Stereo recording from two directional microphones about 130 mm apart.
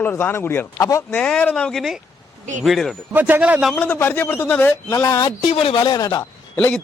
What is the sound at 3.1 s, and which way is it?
Speech, 15° right (ahead or behind).